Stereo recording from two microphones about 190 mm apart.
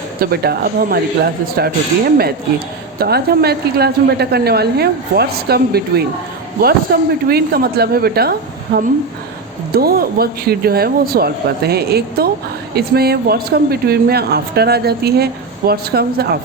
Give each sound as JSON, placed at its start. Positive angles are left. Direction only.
{"t": 0.2, "sound": "speech", "side_deg": -55}
{"t": 3.0, "sound": "speech", "side_deg": -55}